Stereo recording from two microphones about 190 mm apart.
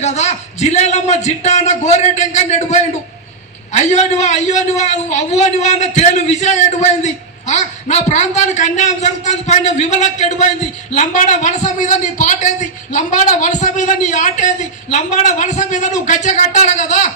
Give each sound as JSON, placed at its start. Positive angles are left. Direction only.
{"t": 0.0, "sound": "a man's voice", "side_deg": 35}